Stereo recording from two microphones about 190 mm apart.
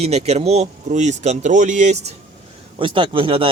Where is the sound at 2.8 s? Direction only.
25° right (ahead or behind).